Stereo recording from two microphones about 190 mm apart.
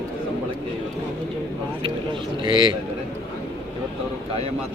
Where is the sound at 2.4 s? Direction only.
25° right (ahead or behind).